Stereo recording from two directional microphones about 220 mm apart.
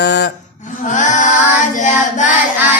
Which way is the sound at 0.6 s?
35° left (ahead or behind).